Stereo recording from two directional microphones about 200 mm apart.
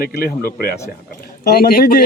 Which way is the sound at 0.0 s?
45° left (ahead or behind).